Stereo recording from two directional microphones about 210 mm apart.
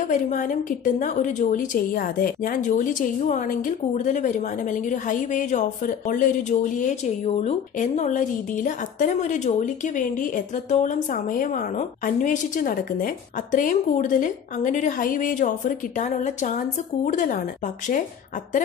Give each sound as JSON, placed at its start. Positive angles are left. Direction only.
{"t": 0.1, "sound": "a woman's voice", "side_deg": 40}